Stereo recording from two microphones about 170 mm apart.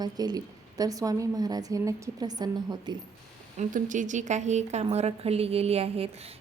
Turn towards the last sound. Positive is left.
turn(degrees=-35)  # may be behind; listen again after turning